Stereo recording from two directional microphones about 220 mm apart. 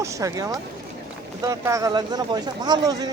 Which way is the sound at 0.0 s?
15° right (ahead or behind).